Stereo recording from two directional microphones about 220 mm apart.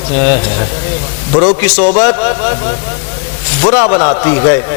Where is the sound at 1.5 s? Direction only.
10° left (ahead or behind).